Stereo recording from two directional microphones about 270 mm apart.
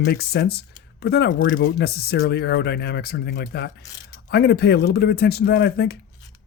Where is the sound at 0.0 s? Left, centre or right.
Left.